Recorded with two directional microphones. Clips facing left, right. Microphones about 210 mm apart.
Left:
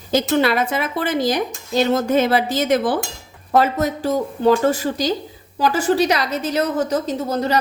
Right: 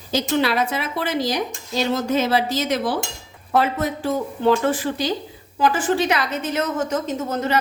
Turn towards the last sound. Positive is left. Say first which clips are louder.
# left 2 dB
turn(degrees=35)  # may be behind; listen again after turning